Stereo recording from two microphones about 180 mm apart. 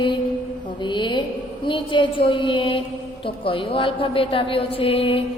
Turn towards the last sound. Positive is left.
turn(degrees=30)  # may be behind; listen again after turning